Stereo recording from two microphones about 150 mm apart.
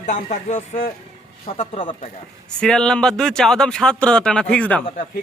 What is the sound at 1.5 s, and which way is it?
Speech, 40° left (ahead or behind).